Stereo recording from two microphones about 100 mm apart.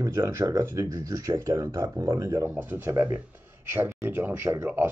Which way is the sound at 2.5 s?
20° right (ahead or behind).